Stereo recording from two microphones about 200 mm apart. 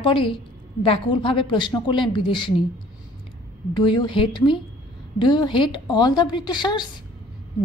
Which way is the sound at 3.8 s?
25° left (ahead or behind).